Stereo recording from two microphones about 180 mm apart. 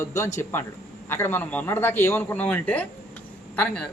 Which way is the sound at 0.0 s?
15° left (ahead or behind).